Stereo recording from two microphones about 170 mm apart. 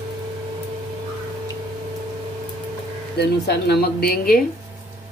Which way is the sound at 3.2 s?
75° left (ahead or behind).